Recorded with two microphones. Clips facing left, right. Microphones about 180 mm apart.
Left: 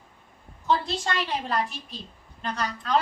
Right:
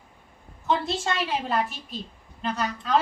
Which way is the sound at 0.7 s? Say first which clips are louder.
Even; 20° right (ahead or behind).